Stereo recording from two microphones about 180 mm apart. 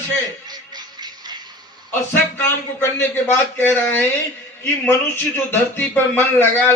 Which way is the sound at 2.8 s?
10° left (ahead or behind).